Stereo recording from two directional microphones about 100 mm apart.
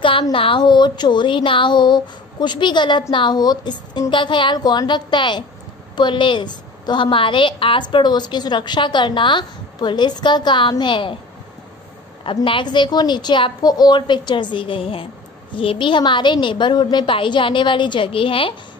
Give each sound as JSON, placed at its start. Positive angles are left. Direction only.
{"t": 0.0, "sound": "a woman's voice", "side_deg": 60}
{"t": 12.4, "sound": "a woman's voice", "side_deg": 50}